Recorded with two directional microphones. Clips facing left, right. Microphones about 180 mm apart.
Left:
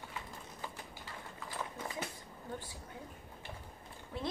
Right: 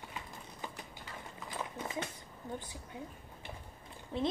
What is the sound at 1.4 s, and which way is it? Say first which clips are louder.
Horse: right 1 dB; 20° right (ahead or behind).